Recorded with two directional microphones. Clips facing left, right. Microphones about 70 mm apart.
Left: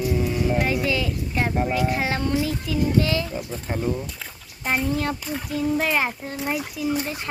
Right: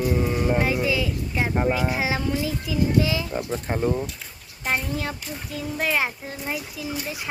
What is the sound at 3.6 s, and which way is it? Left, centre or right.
Speech, centre.